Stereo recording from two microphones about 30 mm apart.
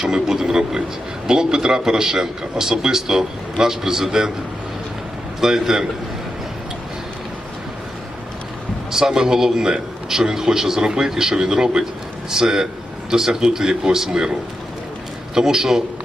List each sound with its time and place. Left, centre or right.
0.0 s a man's voice: right
5.4 s speech: centre
8.9 s a man's voice: centre
11.4 s a man's voice: right
15.4 s speech: centre